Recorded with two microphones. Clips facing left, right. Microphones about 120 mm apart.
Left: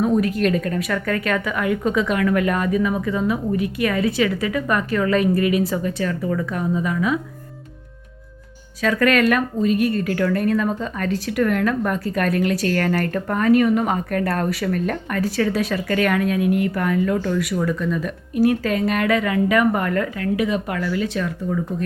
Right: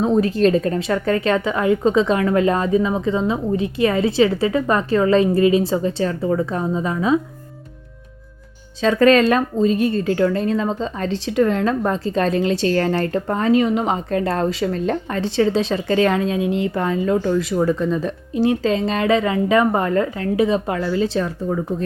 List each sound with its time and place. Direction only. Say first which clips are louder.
0.0 s a woman's voice: right 3 dB; 30° right (ahead or behind)
8.8 s a woman's voice: right 4 dB; 25° right (ahead or behind)